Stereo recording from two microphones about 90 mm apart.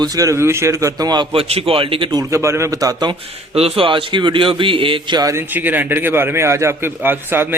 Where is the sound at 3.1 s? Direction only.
90° right; by 5.1 s 75° right (ahead or behind).